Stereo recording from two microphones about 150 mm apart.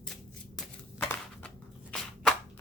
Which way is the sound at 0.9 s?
15° left (ahead or behind).